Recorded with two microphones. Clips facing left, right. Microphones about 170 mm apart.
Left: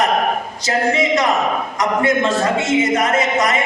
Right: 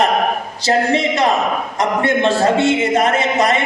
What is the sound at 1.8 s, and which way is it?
A man's voice, 30° right (ahead or behind).